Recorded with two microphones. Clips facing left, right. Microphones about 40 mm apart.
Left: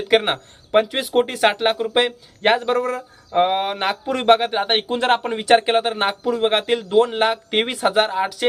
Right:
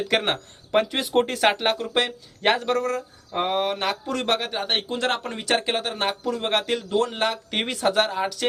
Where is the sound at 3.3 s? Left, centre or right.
Left.